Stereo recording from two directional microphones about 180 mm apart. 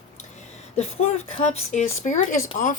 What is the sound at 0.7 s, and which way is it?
Speech, 40° left (ahead or behind).